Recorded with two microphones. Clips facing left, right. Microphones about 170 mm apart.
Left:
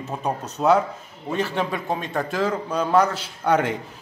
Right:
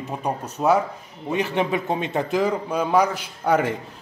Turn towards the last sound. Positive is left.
turn(degrees=-10)  # may be behind; listen again after turning